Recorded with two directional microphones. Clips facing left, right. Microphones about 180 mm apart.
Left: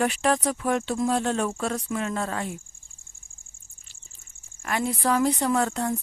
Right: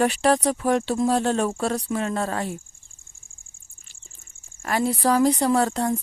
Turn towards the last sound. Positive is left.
turn(degrees=-35)  # may be behind; listen again after turning